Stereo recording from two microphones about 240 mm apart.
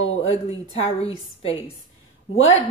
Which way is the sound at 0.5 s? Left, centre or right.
Left.